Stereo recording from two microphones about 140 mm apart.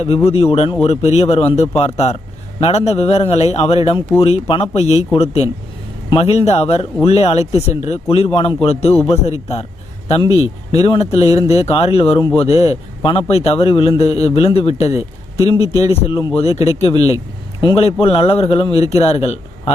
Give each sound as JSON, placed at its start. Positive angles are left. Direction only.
{"t": 0.3, "sound": "a man's voice", "side_deg": 45}
{"t": 10.3, "sound": "speech", "side_deg": -30}
{"t": 10.8, "sound": "a man's voice", "side_deg": 45}
{"t": 17.6, "sound": "a man's voice", "side_deg": 35}